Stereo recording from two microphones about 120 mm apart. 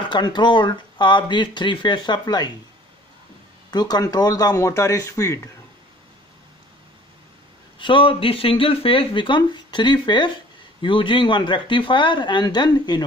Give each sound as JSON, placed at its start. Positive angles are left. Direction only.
{"t": 0.1, "sound": "speech", "side_deg": 40}
{"t": 3.7, "sound": "speech", "side_deg": 35}
{"t": 7.8, "sound": "speech", "side_deg": 45}